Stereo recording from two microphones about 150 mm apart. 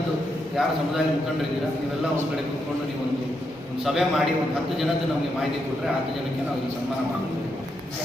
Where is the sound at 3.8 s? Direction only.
Centre (ahead or behind).